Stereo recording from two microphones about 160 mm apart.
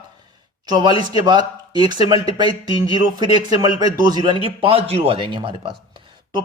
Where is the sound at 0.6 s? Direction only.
25° right (ahead or behind).